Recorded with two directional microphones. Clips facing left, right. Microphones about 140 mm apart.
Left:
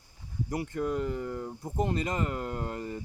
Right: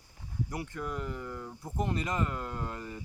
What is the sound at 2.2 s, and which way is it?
Speech, 55° left (ahead or behind).